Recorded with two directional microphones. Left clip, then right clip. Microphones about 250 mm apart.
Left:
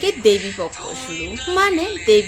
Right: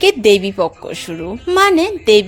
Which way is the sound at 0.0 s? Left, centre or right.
Right.